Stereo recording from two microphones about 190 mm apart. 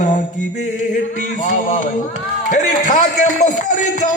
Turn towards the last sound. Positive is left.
turn(degrees=40)  # may be behind; listen again after turning